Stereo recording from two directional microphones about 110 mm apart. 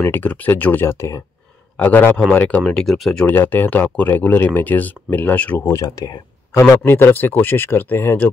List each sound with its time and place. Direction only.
0.0 s speech: 15° left (ahead or behind)
3.3 s speech: 15° left (ahead or behind)
5.7 s speech: 30° left (ahead or behind)
6.8 s speech: 20° left (ahead or behind)